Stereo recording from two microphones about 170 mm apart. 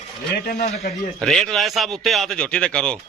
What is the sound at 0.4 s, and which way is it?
Speech, 65° left (ahead or behind).